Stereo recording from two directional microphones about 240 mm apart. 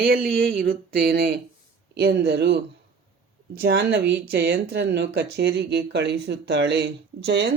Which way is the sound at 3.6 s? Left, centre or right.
Right.